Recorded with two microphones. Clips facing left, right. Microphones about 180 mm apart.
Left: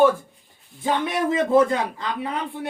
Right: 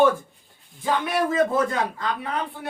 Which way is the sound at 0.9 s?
20° left (ahead or behind).